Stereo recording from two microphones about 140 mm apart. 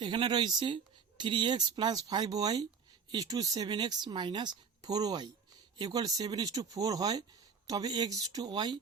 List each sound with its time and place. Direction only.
0.0 s speech: 35° right (ahead or behind)